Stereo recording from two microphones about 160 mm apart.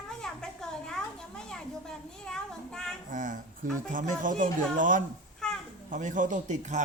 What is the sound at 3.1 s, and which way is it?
A man's voice, 55° right (ahead or behind).